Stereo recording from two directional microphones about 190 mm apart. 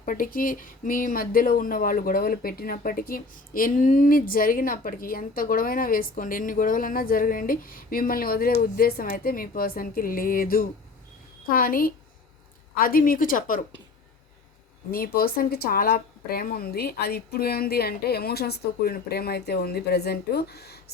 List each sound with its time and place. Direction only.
0.0 s speech: 45° left (ahead or behind)
14.8 s speech: 50° left (ahead or behind)